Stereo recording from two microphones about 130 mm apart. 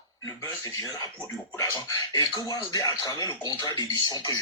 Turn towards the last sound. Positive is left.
turn(degrees=30)  # may be behind; listen again after turning